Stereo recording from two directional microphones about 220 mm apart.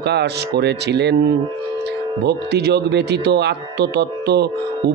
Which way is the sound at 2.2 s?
50° right (ahead or behind).